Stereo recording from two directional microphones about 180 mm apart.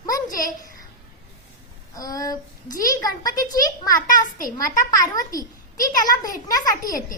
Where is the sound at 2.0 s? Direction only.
20° left (ahead or behind).